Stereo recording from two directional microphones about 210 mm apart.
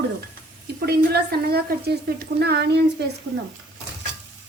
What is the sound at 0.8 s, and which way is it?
A woman's voice, 50° right (ahead or behind).